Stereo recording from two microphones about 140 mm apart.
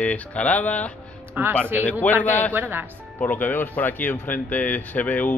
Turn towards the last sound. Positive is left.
turn(degrees=10)  # may be behind; listen again after turning